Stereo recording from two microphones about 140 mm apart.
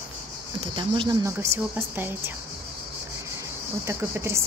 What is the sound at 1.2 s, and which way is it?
Speech, 20° right (ahead or behind).